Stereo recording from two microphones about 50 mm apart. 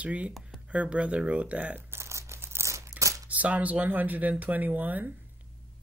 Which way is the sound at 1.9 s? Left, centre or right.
Right.